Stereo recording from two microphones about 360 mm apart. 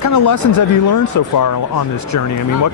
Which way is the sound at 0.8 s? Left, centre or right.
Left.